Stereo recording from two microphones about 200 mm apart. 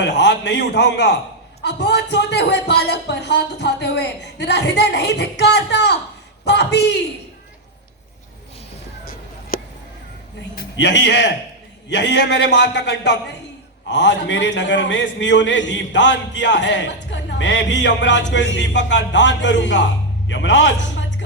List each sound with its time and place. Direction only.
0.0 s a man's voice: 60° left (ahead or behind)
9.5 s a sound: 45° left (ahead or behind)
10.8 s a man's voice: 60° left (ahead or behind)